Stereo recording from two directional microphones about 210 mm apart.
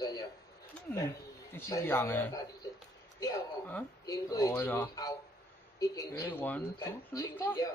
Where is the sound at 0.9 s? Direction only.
15° left (ahead or behind).